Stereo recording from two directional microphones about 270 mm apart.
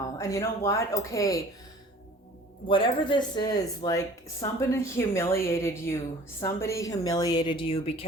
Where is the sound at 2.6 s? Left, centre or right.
Centre.